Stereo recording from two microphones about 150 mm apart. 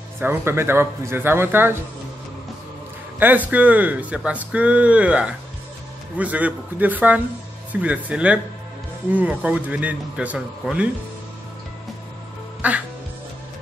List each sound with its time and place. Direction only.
0.2 s speech: 15° right (ahead or behind)
3.2 s speech: 10° right (ahead or behind)
12.6 s speech: 10° right (ahead or behind)